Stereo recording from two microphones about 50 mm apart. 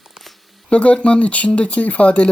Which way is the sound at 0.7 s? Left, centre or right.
Left.